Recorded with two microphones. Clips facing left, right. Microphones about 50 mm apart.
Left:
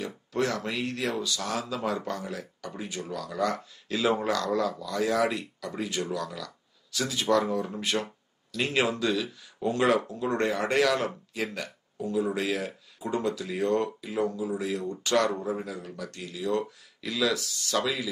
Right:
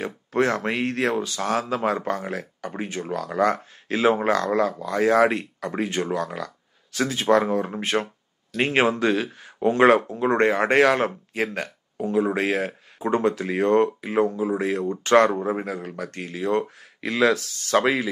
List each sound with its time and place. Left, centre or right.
0.0 s speech: right